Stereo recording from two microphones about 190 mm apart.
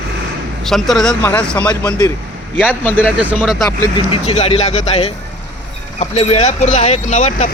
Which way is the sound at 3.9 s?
30° left (ahead or behind).